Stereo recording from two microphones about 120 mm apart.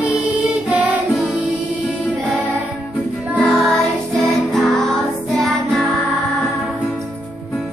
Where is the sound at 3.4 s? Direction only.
5° left (ahead or behind).